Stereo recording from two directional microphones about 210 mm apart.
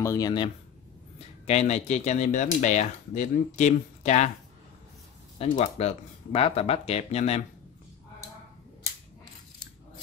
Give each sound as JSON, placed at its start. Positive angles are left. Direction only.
{"t": 0.0, "sound": "speech", "side_deg": 15}
{"t": 1.4, "sound": "speech", "side_deg": 30}
{"t": 5.4, "sound": "speech", "side_deg": 30}